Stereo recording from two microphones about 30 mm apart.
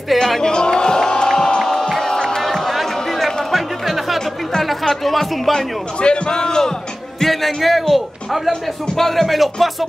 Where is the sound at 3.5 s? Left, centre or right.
Centre.